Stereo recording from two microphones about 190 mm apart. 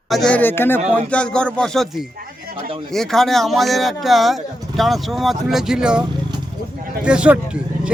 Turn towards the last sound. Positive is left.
turn(degrees=-5)  # may be behind; listen again after turning